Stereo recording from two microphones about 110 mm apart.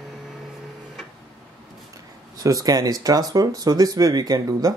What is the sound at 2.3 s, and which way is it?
Speech, 35° right (ahead or behind).